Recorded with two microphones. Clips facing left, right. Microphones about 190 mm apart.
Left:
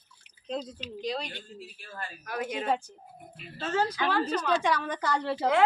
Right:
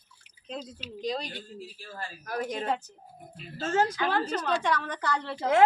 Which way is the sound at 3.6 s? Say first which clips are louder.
Right 2 dB; 45° right (ahead or behind).